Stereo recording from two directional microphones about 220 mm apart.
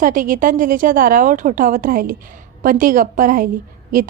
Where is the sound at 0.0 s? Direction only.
40° right (ahead or behind).